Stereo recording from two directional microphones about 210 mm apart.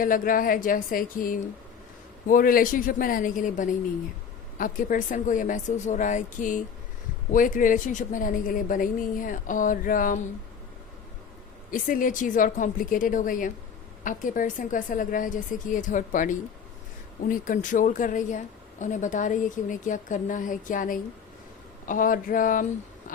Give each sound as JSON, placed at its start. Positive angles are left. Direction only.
{"t": 0.0, "sound": "a woman's voice", "side_deg": 40}
{"t": 11.7, "sound": "a woman's voice", "side_deg": 40}